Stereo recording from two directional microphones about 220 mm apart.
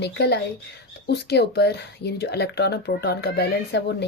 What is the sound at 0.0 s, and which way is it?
Speech, 50° left (ahead or behind).